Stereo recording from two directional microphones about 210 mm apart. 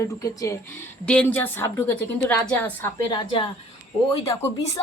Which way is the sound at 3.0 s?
20° left (ahead or behind).